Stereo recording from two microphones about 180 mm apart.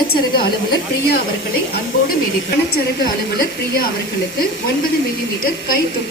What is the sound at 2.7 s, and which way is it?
Speech, 60° left (ahead or behind).